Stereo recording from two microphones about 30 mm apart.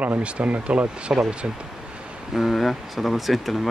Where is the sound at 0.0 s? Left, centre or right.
Right.